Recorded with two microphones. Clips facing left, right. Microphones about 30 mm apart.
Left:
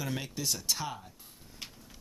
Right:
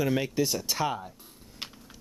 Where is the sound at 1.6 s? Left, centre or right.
Right.